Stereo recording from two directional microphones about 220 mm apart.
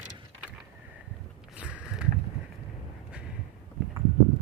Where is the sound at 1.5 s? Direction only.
5° right (ahead or behind).